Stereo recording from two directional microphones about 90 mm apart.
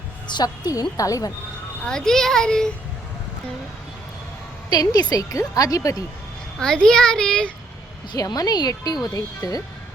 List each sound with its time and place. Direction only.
0.3 s speech: 50° left (ahead or behind)
1.8 s a child's voice: 5° left (ahead or behind)
4.7 s speech: 45° left (ahead or behind)
6.6 s a child's voice: 5° left (ahead or behind)
8.1 s speech: 45° left (ahead or behind)